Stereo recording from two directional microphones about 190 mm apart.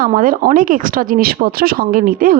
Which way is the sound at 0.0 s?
45° right (ahead or behind).